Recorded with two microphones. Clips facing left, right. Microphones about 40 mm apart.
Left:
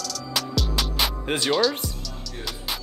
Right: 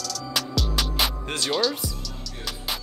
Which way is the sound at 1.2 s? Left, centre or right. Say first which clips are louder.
Left 4 dB; centre.